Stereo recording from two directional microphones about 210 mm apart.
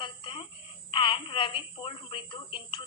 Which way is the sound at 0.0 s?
25° left (ahead or behind).